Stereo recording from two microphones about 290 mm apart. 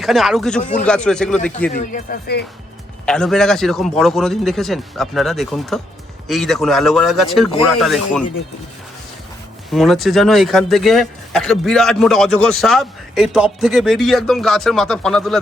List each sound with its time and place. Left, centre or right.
0.0 s speech: centre
0.6 s speech: left
0.9 s speech: centre
1.7 s speech: left
3.1 s speech: centre
9.7 s speech: centre